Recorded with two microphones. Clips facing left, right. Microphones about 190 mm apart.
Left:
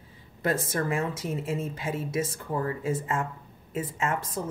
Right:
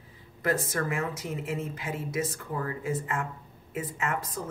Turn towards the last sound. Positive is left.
turn(degrees=25)  # may be behind; listen again after turning